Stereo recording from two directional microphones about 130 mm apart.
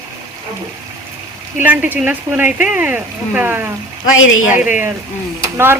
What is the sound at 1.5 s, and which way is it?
Speech, 15° right (ahead or behind).